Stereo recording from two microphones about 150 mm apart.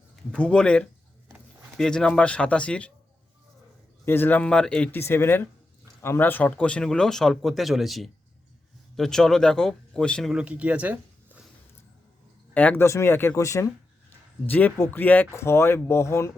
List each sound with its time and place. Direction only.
0.3 s speech: 5° left (ahead or behind)
4.0 s speech: 15° left (ahead or behind)
10.3 s speech: 10° right (ahead or behind)
12.5 s speech: 10° left (ahead or behind)